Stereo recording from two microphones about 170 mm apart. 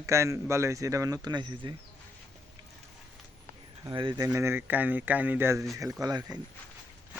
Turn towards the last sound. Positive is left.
turn(degrees=-20)  # may be behind; listen again after turning